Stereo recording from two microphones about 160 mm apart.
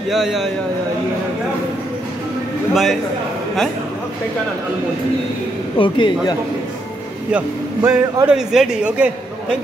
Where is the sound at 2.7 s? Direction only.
Centre (ahead or behind).